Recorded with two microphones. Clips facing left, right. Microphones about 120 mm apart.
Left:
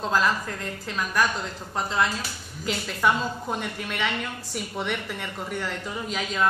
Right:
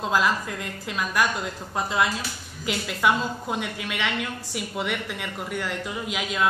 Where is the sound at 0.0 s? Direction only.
10° right (ahead or behind).